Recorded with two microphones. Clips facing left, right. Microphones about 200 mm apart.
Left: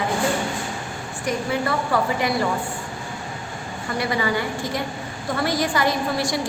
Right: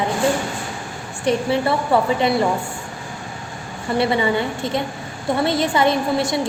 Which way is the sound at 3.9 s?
25° right (ahead or behind).